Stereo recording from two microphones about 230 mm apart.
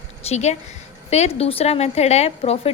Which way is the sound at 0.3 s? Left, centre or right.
Left.